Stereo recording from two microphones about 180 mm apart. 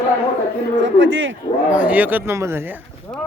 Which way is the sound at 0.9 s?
90° right.